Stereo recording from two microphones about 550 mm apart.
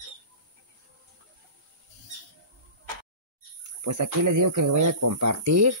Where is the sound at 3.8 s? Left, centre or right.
Right.